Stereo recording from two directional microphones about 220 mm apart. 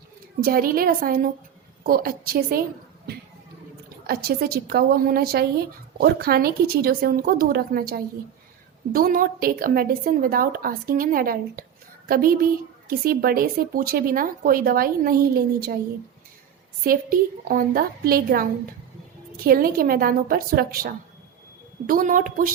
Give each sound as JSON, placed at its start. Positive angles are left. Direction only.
{"t": 0.3, "sound": "a woman's voice", "side_deg": -45}
{"t": 4.0, "sound": "a woman's voice", "side_deg": -45}
{"t": 16.8, "sound": "a woman's voice", "side_deg": -40}
{"t": 19.5, "sound": "a woman's voice", "side_deg": -40}